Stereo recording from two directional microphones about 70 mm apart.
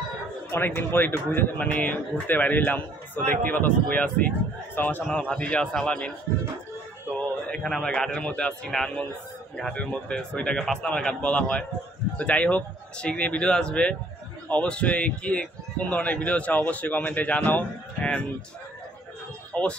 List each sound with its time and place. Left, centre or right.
0.5 s a man's voice: left
5.1 s a man's voice: centre
7.2 s a man's voice: centre
9.8 s a man's voice: centre
19.5 s speech: centre